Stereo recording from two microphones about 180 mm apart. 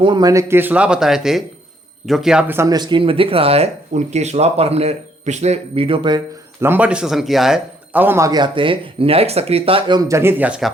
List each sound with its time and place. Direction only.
0.0 s speech: 25° right (ahead or behind)
6.7 s speech: 10° right (ahead or behind)